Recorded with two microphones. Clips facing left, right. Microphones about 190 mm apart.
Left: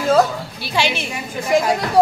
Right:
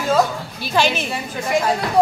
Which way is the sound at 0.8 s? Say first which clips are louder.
Right 2 dB; 10° left (ahead or behind).